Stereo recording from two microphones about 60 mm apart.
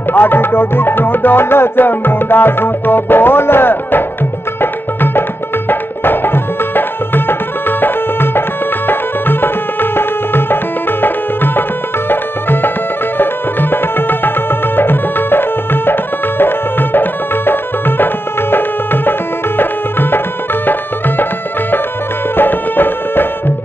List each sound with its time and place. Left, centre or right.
0.1 s music: left
5.7 s tabla: left
7.8 s music: left
21.2 s music: left